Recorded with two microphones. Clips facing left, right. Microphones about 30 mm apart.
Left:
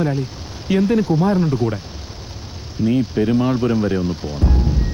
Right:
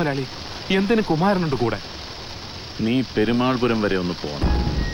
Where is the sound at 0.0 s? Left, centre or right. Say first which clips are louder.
Left 2 dB; right.